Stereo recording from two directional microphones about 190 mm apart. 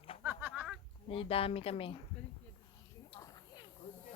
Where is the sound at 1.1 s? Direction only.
30° left (ahead or behind).